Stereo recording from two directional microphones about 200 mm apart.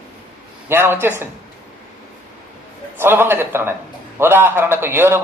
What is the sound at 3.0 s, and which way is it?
A woman's voice, 10° right (ahead or behind).